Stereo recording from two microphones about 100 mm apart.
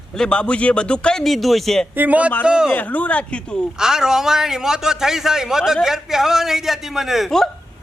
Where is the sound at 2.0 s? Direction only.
15° right (ahead or behind).